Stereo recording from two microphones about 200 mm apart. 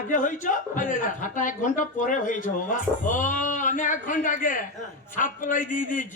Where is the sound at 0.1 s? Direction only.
40° left (ahead or behind).